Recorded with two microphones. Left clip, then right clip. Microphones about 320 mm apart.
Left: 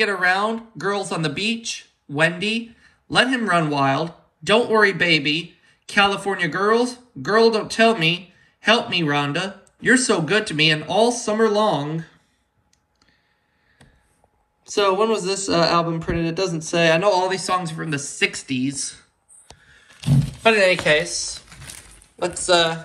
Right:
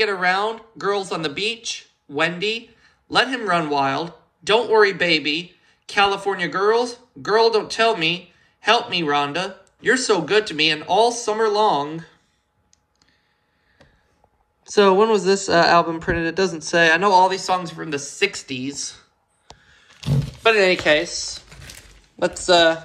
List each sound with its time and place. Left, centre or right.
0.0 s speech: centre
14.6 s speech: centre
19.6 s roaring cats: centre
22.3 s speech: right